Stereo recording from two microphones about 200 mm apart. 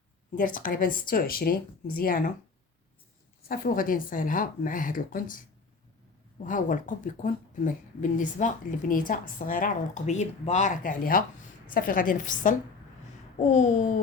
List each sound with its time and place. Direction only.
0.3 s speech: 45° left (ahead or behind)
3.5 s speech: 45° left (ahead or behind)
6.4 s a woman's voice: 40° left (ahead or behind)